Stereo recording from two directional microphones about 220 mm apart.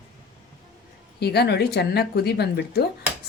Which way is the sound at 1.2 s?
50° left (ahead or behind).